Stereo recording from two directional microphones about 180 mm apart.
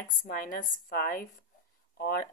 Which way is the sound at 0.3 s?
50° left (ahead or behind).